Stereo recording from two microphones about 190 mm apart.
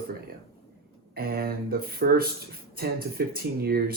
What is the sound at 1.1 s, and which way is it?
Speech, 50° right (ahead or behind).